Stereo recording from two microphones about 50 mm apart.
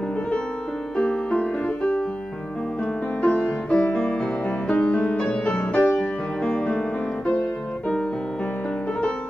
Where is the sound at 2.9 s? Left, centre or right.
Left.